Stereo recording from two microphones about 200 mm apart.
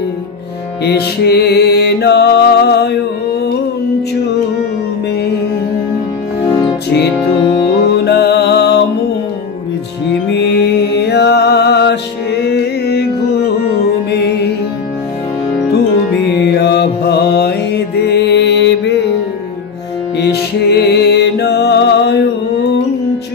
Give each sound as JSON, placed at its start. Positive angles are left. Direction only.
{"t": 0.8, "sound": "music", "side_deg": 55}
{"t": 7.9, "sound": "music", "side_deg": 55}
{"t": 10.3, "sound": "music", "side_deg": 60}
{"t": 14.1, "sound": "music", "side_deg": 55}
{"t": 16.3, "sound": "mantra", "side_deg": 55}
{"t": 20.2, "sound": "music", "side_deg": 55}